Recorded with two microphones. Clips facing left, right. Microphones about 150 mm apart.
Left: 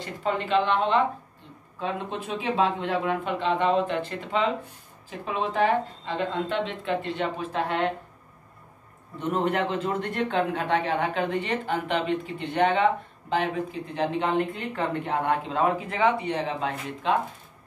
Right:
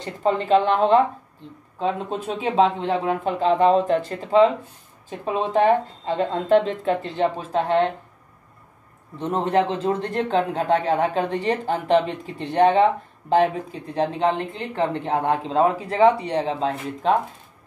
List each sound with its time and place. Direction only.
0.0 s speech: 40° right (ahead or behind)
9.2 s speech: 30° right (ahead or behind)
13.9 s speech: 30° right (ahead or behind)